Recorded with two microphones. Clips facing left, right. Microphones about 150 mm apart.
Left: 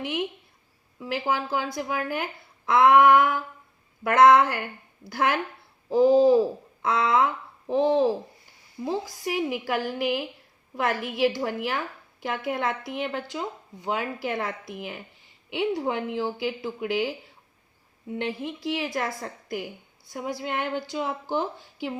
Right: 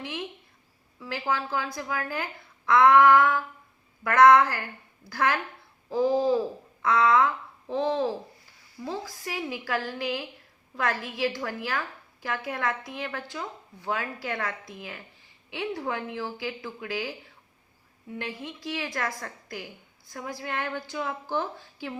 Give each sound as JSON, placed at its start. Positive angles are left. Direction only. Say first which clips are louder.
{"t": 0.0, "sound": "a woman's voice", "louder": "left 6 dB", "side_deg": 20}